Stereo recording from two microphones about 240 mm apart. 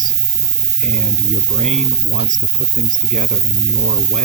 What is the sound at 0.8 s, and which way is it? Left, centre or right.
Speech, right.